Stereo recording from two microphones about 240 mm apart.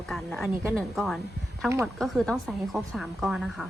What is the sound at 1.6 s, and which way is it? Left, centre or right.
Speech, centre.